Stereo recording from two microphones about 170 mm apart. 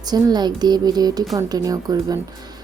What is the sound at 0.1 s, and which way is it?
Speech, 25° right (ahead or behind).